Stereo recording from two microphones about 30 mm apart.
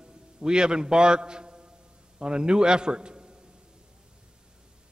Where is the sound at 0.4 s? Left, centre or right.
Right.